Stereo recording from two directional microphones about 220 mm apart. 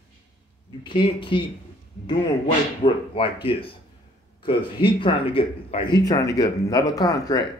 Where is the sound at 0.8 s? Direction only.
25° left (ahead or behind).